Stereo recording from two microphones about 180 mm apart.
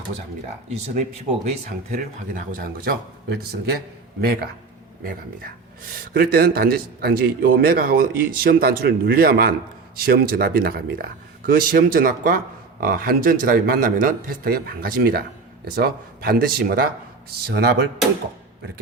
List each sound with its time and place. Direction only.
1.7 s a man's voice: 50° right (ahead or behind)
5.9 s a man's voice: 55° right (ahead or behind)